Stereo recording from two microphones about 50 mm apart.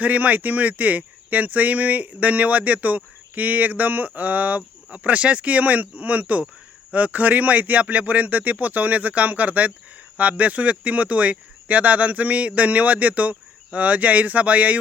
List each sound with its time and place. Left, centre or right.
0.0 s speech: right